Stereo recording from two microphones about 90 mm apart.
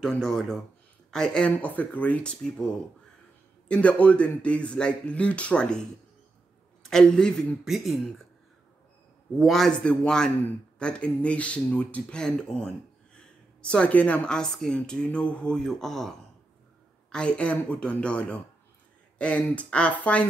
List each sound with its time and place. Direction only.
0.0 s speech: 5° left (ahead or behind)
3.6 s a man's voice: 15° left (ahead or behind)
7.6 s speech: centre (ahead or behind)
9.4 s speech: 5° left (ahead or behind)